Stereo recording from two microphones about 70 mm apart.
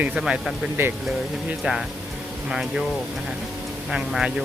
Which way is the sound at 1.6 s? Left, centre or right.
Centre.